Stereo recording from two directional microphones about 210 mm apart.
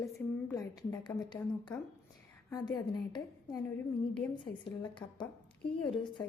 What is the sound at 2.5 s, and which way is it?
A woman's voice, 20° left (ahead or behind).